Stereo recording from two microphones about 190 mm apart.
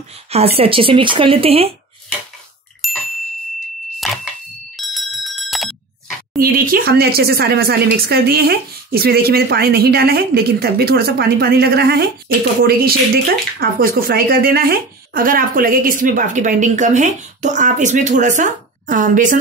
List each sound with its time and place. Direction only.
0.1 s speech: 30° right (ahead or behind)
2.8 s ding: centre (ahead or behind)
4.0 s a sound: centre (ahead or behind)
4.7 s bicycle bell: centre (ahead or behind)
6.3 s speech: 50° right (ahead or behind)